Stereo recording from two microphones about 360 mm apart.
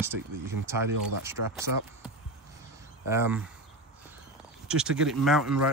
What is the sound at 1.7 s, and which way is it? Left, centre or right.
Speech, right.